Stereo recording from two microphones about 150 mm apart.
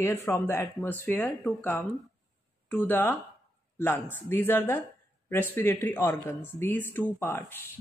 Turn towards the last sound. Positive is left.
turn(degrees=15)  # may be behind; listen again after turning